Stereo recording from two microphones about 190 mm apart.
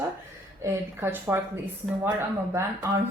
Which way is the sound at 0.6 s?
10° right (ahead or behind).